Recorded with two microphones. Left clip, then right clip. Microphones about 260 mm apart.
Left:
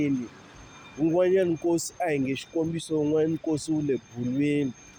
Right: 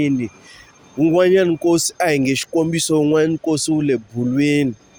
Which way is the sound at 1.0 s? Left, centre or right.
Right.